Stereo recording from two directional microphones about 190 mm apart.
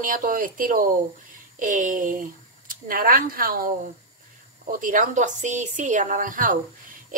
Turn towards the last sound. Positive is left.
turn(degrees=-45)  # may be behind; listen again after turning